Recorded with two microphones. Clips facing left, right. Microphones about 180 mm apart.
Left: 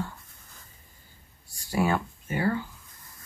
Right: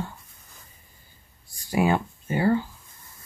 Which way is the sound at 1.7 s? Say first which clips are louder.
Right 3 dB; 15° right (ahead or behind).